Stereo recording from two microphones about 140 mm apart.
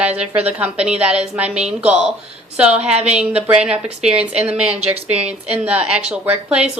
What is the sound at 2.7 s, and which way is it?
Speech, 50° right (ahead or behind).